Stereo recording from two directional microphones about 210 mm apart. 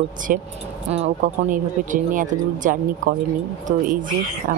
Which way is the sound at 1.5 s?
40° right (ahead or behind).